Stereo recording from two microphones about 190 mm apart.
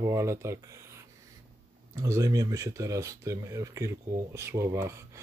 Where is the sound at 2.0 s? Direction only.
15° right (ahead or behind).